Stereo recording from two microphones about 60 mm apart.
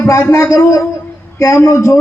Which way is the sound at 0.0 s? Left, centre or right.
Left.